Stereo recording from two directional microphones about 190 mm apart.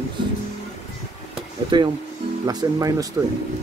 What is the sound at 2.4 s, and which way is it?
Speech, 20° right (ahead or behind).